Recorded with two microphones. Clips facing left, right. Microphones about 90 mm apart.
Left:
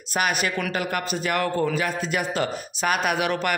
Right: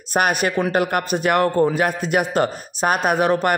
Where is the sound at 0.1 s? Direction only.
45° right (ahead or behind).